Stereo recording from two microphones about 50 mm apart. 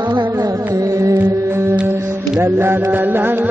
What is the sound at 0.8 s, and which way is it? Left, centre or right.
Music, right.